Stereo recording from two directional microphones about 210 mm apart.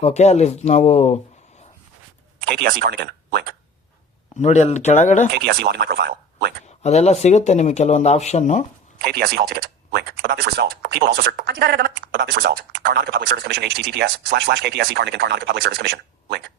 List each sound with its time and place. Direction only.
0.0 s speech: 30° left (ahead or behind)
2.4 s speech: 50° right (ahead or behind)
4.4 s speech: 35° left (ahead or behind)
5.3 s speech: 50° right (ahead or behind)
6.7 s speech: 30° left (ahead or behind)
9.0 s speech: 50° right (ahead or behind)